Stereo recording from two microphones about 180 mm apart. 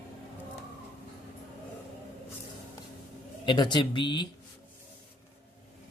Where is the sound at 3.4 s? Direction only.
25° left (ahead or behind).